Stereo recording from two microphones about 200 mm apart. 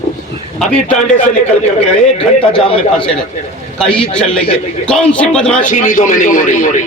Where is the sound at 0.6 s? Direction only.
5° left (ahead or behind).